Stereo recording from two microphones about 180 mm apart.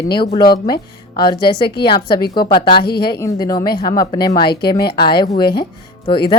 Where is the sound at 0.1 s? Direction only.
25° left (ahead or behind).